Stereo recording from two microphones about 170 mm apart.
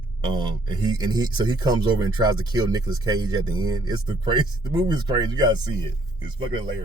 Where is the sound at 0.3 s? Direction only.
25° right (ahead or behind).